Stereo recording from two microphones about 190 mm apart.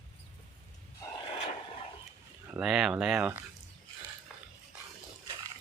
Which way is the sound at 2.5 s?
5° right (ahead or behind).